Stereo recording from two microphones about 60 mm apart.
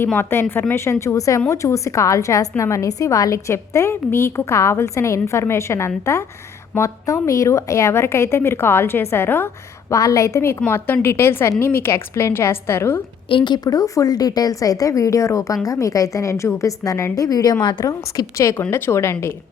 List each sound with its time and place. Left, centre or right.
0.2 s a woman's voice: left
6.7 s a woman's voice: left
9.9 s speech: left
10.7 s a woman's voice: left
13.7 s a woman's voice: left
18.7 s a woman's voice: left